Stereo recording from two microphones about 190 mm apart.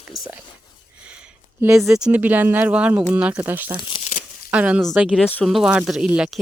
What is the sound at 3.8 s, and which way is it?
Crumpling, 25° left (ahead or behind).